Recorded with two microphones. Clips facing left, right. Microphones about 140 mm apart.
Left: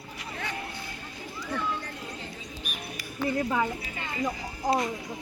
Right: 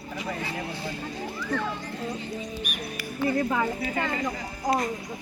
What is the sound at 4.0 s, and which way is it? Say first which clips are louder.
Speech: right 8 dB; 50° right (ahead or behind).